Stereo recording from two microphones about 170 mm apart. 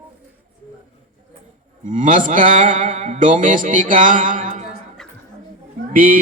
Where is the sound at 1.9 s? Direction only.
50° right (ahead or behind).